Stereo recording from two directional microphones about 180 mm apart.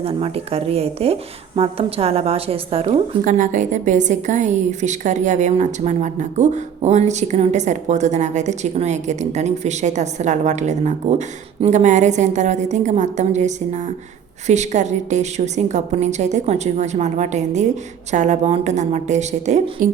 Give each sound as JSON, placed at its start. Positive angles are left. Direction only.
{"t": 0.0, "sound": "a woman's voice", "side_deg": -35}
{"t": 3.2, "sound": "a woman's voice", "side_deg": -45}